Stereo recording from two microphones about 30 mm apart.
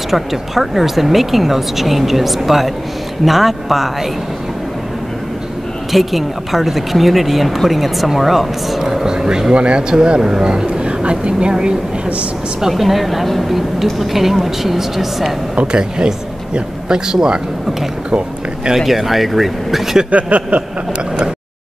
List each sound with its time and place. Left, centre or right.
0.1 s speech: centre
5.9 s speech: centre
9.5 s speech: right
12.6 s a woman's voice: centre
15.6 s speech: right
18.8 s speech: centre
20.1 s a sound: right